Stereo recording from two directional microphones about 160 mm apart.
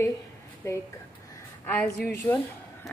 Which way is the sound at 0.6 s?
20° left (ahead or behind).